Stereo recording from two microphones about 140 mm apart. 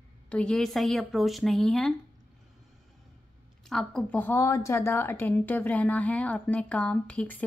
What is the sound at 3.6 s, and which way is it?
A woman's voice, 5° left (ahead or behind).